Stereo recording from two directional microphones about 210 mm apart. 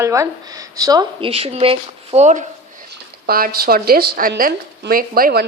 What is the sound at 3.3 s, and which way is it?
A woman's voice, 45° right (ahead or behind).